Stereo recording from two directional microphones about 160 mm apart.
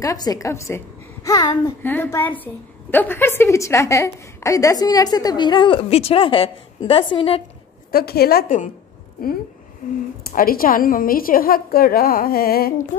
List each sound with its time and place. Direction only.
0.0 s a woman's voice: 20° left (ahead or behind)
1.8 s a woman's voice: 15° left (ahead or behind); by 7.4 s 35° left (ahead or behind)
7.9 s a woman's voice: 75° left (ahead or behind)
10.2 s a woman's voice: 65° left (ahead or behind)